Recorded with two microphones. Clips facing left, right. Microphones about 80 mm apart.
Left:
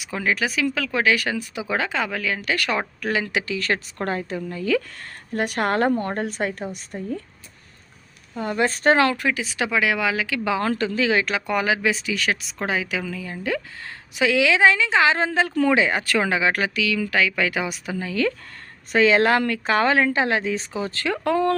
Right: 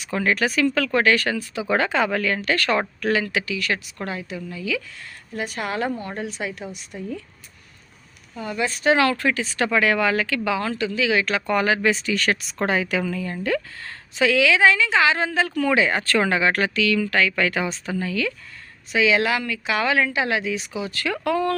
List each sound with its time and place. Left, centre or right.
0.0 s a woman's voice: centre
1.6 s a woman's voice: centre
3.2 s speech: left
3.5 s a woman's voice: left
8.4 s a woman's voice: left
9.0 s a woman's voice: centre
10.3 s speech: left
10.6 s speech: left
11.3 s speech: centre
14.2 s a woman's voice: left
18.1 s speech: left